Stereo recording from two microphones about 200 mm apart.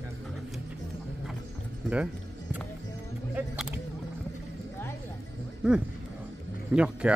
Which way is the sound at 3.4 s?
5° right (ahead or behind).